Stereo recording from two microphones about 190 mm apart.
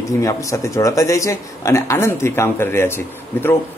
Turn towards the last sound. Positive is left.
turn(degrees=10)  # may be behind; listen again after turning